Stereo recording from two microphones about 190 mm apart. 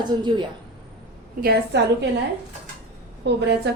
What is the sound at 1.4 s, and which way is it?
Speech, 55° right (ahead or behind).